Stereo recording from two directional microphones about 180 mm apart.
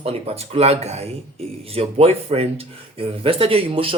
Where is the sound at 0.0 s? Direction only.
35° right (ahead or behind).